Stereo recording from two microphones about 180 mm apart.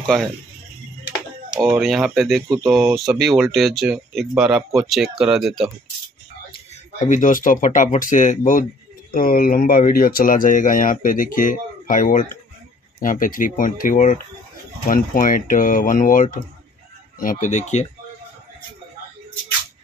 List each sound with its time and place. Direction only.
0.0 s speech: 5° left (ahead or behind)
1.5 s speech: centre (ahead or behind)
6.5 s speech: 40° left (ahead or behind)